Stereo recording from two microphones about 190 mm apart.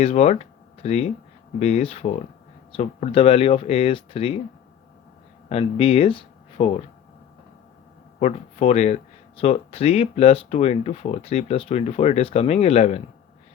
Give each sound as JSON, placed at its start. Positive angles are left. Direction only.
{"t": 0.0, "sound": "speech", "side_deg": 35}
{"t": 5.5, "sound": "speech", "side_deg": 30}
{"t": 8.2, "sound": "speech", "side_deg": 35}